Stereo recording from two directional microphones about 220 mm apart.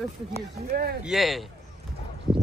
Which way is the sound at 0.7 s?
45° right (ahead or behind).